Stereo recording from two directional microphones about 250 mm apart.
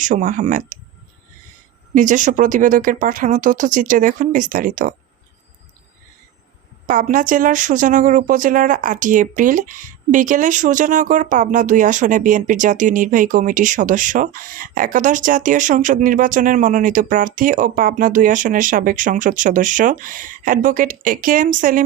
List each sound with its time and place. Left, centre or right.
0.0 s speech: right
2.0 s speech: right
6.8 s speech: right